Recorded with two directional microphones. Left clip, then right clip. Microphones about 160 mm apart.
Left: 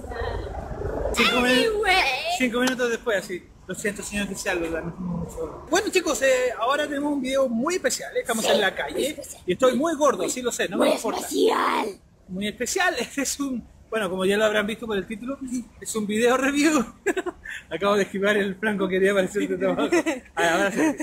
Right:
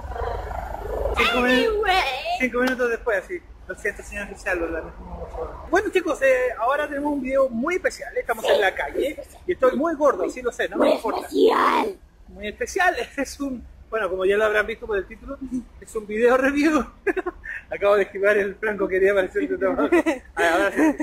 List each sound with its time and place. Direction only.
1.1 s speech: 5° right (ahead or behind)
1.5 s a sound: centre (ahead or behind)
2.3 s a man's voice: 30° left (ahead or behind)
5.7 s a man's voice: 25° left (ahead or behind)
10.8 s speech: centre (ahead or behind)
11.1 s speech: 10° right (ahead or behind)
12.4 s a man's voice: 25° left (ahead or behind)
16.1 s a man's voice: 20° left (ahead or behind)
19.9 s speech: 20° right (ahead or behind)
20.3 s a man's voice: 25° left (ahead or behind)